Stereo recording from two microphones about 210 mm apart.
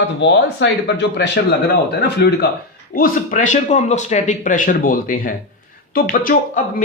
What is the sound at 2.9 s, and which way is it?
Speech, 40° left (ahead or behind).